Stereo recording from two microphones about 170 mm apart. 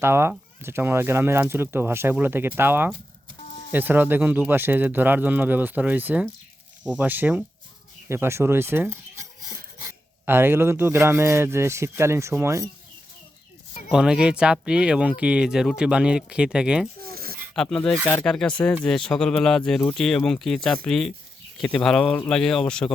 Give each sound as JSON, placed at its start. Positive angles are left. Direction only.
{"t": 0.0, "sound": "speech", "side_deg": -15}
{"t": 13.9, "sound": "speech", "side_deg": -5}
{"t": 17.0, "sound": "a sound", "side_deg": -60}
{"t": 17.5, "sound": "speech", "side_deg": 5}